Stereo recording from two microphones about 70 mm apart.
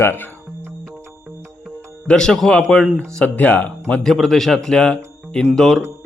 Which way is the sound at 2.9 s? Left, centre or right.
Left.